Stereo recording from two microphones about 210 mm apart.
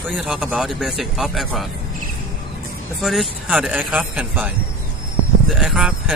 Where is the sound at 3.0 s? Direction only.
Centre (ahead or behind).